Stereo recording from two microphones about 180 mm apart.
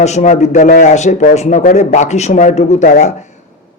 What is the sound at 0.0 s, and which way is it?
A man's voice, 40° left (ahead or behind).